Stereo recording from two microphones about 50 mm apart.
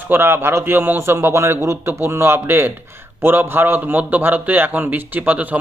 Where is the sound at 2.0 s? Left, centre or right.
Right.